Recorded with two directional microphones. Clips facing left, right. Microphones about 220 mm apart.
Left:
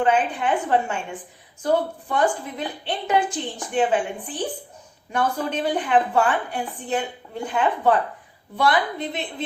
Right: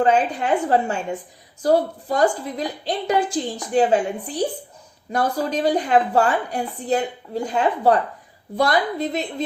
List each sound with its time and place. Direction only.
0.0 s a woman's voice: 40° right (ahead or behind)